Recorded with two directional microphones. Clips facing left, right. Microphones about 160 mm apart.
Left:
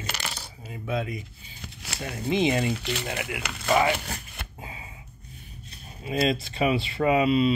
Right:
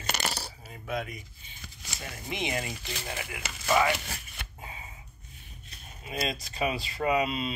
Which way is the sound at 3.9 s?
50° left (ahead or behind).